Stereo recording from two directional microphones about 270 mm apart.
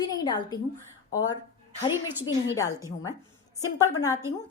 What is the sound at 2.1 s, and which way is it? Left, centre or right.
Speech, centre.